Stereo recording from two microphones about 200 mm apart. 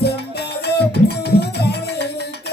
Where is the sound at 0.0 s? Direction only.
55° left (ahead or behind).